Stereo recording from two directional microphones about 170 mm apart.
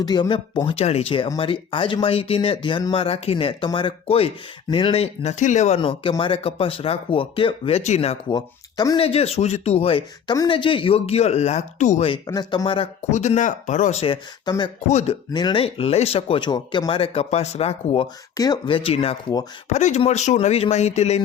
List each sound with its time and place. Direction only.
0.0 s speech: 25° left (ahead or behind)
8.4 s speech: 20° left (ahead or behind)
9.0 s speech: 35° left (ahead or behind)
12.3 s speech: 25° left (ahead or behind); by 15.1 s 40° left (ahead or behind)
15.3 s speech: 25° left (ahead or behind)
18.3 s speech: 25° left (ahead or behind); by 21.2 s 40° left (ahead or behind)